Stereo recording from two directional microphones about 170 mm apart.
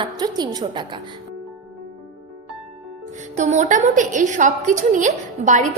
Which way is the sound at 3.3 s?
45° right (ahead or behind).